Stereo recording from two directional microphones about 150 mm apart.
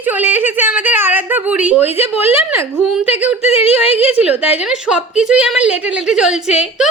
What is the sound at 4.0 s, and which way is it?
A woman's voice, 10° right (ahead or behind).